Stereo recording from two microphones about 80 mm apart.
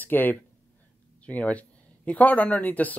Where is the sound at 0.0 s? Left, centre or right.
Left.